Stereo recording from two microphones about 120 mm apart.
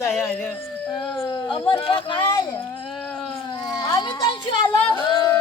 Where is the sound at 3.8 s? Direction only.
40° left (ahead or behind).